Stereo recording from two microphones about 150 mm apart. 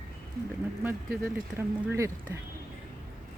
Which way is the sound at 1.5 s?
15° right (ahead or behind).